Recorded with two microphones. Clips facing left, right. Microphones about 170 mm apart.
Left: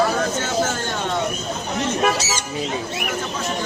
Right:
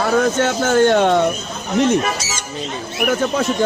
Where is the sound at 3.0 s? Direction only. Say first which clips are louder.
Right 9 dB; 55° right (ahead or behind).